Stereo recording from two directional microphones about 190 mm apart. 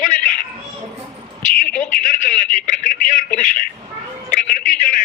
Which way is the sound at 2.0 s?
40° left (ahead or behind).